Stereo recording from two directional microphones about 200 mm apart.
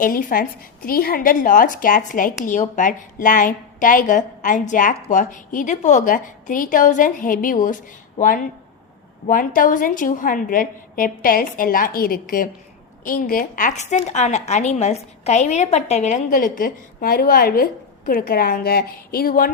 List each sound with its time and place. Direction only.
0.0 s a woman's voice: 45° left (ahead or behind)